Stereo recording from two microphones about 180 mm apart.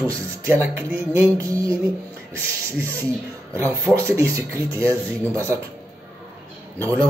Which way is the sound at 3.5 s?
15° right (ahead or behind).